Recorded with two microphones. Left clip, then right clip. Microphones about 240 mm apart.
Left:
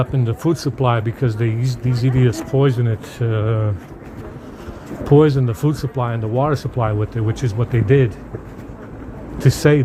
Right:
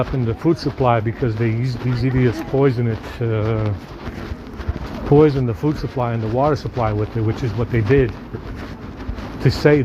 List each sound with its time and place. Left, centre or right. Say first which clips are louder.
0.0 s speech: right 1 dB; left
5.1 s speech: even; left
9.4 s speech: right 1 dB; left